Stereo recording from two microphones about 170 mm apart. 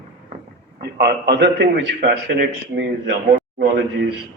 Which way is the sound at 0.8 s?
75° right (ahead or behind).